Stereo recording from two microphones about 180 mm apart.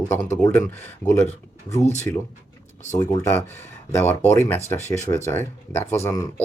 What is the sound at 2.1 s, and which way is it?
Speech, 15° left (ahead or behind).